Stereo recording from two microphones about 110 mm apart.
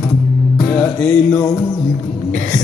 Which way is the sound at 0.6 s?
20° left (ahead or behind).